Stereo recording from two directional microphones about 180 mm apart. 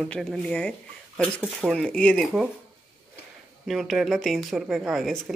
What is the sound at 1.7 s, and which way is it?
Speech, 5° left (ahead or behind).